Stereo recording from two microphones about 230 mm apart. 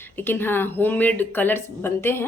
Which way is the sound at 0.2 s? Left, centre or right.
Centre.